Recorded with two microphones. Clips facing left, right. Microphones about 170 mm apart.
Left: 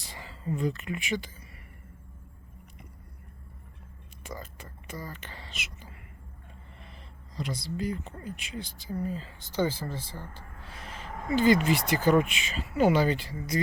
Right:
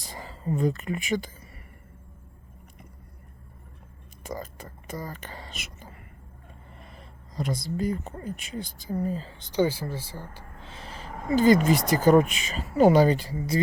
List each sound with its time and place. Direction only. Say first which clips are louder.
0.0 s speech: right 4 dB; 40° right (ahead or behind)
4.2 s whispering: right 6 dB; 40° right (ahead or behind)
6.8 s speech: right 3 dB; 45° right (ahead or behind)
9.4 s speech: right 4 dB; 15° right (ahead or behind)
10.6 s speech: right 2 dB; 25° right (ahead or behind)